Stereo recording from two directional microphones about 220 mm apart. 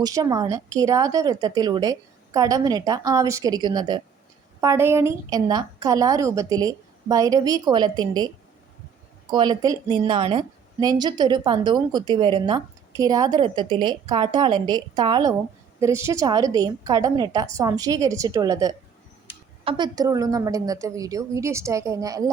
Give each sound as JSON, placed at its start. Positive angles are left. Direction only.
{"t": 0.0, "sound": "a woman's voice", "side_deg": -15}
{"t": 9.3, "sound": "a woman's voice", "side_deg": -20}